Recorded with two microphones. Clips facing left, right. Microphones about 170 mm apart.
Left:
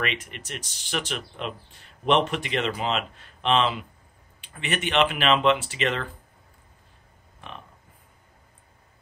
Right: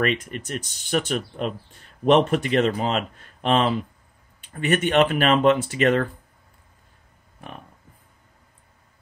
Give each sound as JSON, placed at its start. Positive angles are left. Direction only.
{"t": 0.0, "sound": "speech", "side_deg": -45}